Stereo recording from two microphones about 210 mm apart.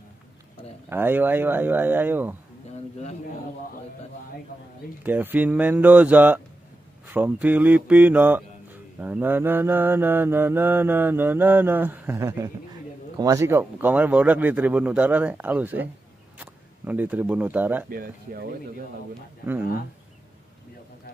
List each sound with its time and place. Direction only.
0.8 s mantra: 10° right (ahead or behind)
5.0 s mantra: 10° right (ahead or behind)
16.3 s speech: 5° right (ahead or behind)
17.8 s speech: 45° right (ahead or behind)